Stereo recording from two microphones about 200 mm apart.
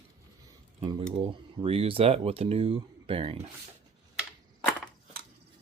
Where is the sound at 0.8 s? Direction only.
25° right (ahead or behind).